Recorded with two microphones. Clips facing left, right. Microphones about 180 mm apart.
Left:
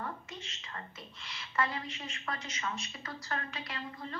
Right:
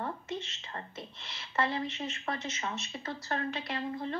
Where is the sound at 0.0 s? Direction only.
30° right (ahead or behind).